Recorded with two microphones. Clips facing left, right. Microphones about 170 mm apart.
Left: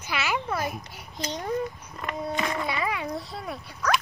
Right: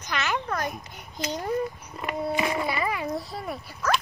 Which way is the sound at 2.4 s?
15° right (ahead or behind).